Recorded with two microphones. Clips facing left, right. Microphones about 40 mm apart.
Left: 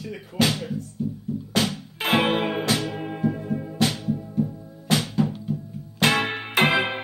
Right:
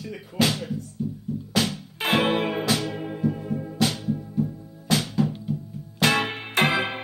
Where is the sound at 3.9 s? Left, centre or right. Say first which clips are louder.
Left 1 dB; centre.